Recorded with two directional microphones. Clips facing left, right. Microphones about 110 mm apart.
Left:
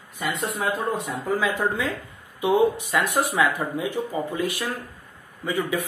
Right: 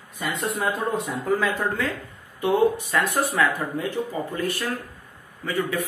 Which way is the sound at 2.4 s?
15° left (ahead or behind).